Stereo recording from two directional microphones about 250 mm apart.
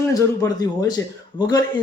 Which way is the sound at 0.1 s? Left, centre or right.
Centre.